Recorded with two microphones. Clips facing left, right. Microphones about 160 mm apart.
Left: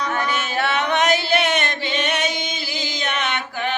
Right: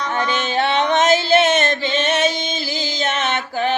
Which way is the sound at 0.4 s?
25° right (ahead or behind).